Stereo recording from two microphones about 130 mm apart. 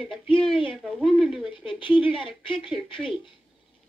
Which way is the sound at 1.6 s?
40° left (ahead or behind).